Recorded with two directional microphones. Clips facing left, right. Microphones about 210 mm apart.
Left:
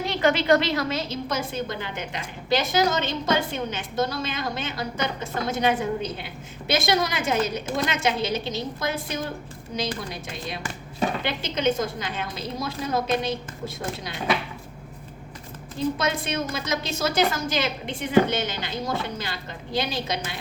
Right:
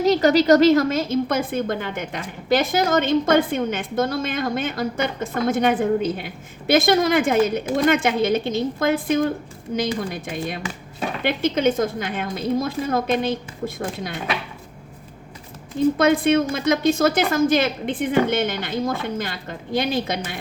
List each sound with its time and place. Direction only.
0.0 s a woman's voice: 40° right (ahead or behind)
16.0 s a woman's voice: 55° right (ahead or behind)